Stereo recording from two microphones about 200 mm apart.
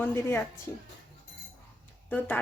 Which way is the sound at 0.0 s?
10° left (ahead or behind).